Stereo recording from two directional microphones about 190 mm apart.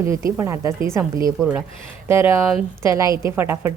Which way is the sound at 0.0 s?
15° right (ahead or behind).